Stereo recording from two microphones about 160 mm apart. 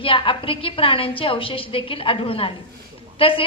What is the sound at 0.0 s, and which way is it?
A woman's voice, 35° left (ahead or behind).